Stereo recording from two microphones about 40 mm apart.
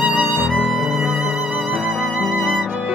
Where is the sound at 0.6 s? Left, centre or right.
Centre.